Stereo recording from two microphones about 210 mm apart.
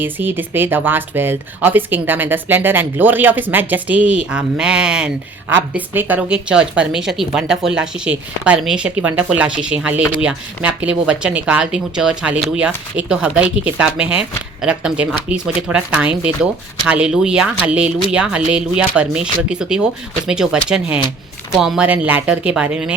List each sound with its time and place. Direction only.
0.0 s speech: 10° right (ahead or behind)